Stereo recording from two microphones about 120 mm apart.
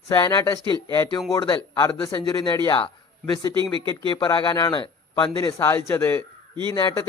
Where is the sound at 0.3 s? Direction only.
25° left (ahead or behind).